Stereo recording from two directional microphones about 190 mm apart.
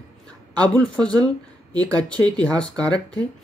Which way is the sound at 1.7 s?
20° right (ahead or behind).